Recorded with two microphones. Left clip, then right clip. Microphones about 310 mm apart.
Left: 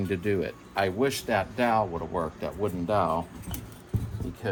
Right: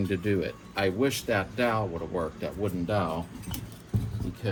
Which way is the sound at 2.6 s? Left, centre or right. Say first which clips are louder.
Left 3 dB; left.